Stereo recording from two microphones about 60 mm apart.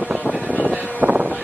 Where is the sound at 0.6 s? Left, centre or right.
Right.